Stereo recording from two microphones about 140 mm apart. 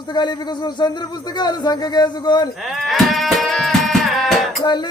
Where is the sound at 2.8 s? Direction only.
Centre (ahead or behind).